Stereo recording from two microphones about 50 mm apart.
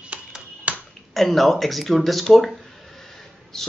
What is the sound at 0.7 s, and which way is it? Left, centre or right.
Finger snapping, right.